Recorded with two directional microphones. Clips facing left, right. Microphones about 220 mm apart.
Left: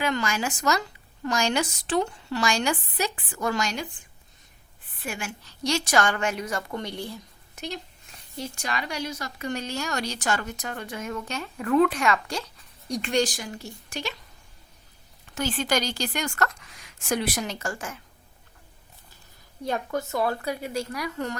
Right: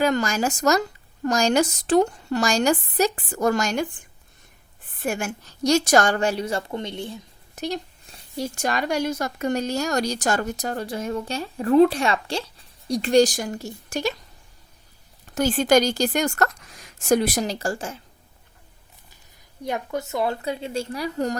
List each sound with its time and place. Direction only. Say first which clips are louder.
0.0 s a woman's voice: right 5 dB; 40° right (ahead or behind)
4.9 s a woman's voice: right 8 dB; 45° right (ahead or behind); by 7.2 s 20° right (ahead or behind)
7.5 s a woman's voice: right 7 dB; 40° right (ahead or behind)
15.4 s a woman's voice: right 8 dB; 45° right (ahead or behind)
19.6 s speech: right 1 dB; 20° right (ahead or behind)